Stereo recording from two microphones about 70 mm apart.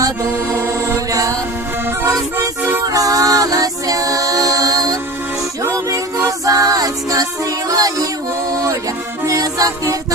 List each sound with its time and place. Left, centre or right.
0.6 s chant: right
2.0 s music: right
9.2 s music: right